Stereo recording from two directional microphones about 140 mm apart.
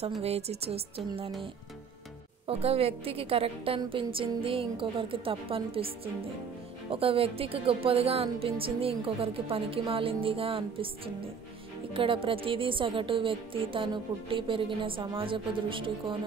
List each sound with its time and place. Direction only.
0.2 s a woman's voice: 50° right (ahead or behind)
2.4 s a woman's voice: 45° right (ahead or behind)
11.9 s speech: 40° right (ahead or behind)